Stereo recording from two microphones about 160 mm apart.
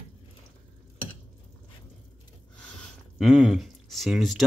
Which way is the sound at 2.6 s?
5° left (ahead or behind).